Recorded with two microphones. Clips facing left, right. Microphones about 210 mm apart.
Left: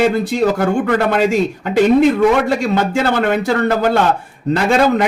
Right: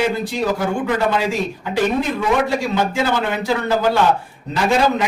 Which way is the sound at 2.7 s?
55° left (ahead or behind).